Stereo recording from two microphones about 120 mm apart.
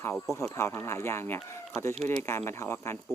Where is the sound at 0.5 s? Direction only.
20° left (ahead or behind).